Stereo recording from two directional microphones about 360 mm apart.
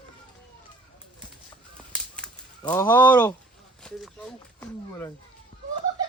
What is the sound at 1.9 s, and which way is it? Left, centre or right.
Whip, centre.